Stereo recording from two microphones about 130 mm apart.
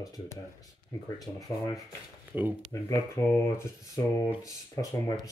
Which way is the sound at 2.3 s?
10° right (ahead or behind).